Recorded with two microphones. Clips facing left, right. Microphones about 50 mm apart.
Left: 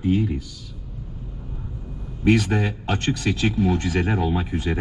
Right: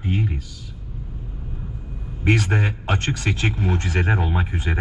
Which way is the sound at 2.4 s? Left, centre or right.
Centre.